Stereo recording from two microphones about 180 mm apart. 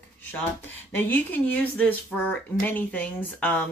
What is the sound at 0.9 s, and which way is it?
Speech, 10° left (ahead or behind).